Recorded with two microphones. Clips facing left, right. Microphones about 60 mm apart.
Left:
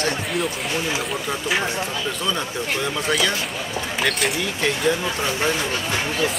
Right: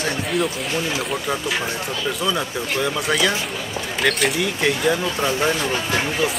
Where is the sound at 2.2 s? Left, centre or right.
Centre.